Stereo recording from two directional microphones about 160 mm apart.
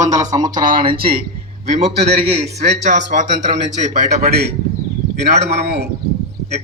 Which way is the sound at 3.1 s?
50° right (ahead or behind).